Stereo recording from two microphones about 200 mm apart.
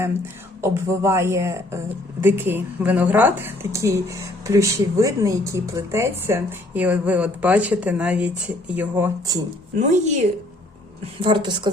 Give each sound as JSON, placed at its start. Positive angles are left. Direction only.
{"t": 0.6, "sound": "a woman's voice", "side_deg": -15}
{"t": 9.7, "sound": "speech", "side_deg": -40}
{"t": 11.2, "sound": "a woman's voice", "side_deg": -25}